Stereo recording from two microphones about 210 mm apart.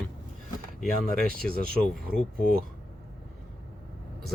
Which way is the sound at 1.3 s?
45° right (ahead or behind).